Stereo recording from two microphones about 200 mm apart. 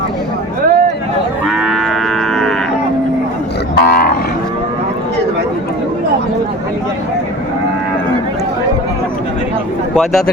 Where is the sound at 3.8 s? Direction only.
50° left (ahead or behind).